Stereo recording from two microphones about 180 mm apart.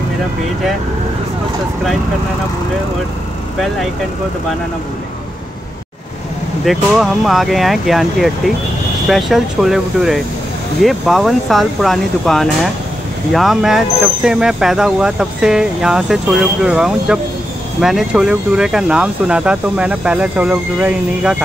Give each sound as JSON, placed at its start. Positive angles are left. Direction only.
{"t": 6.6, "sound": "speech", "side_deg": 0}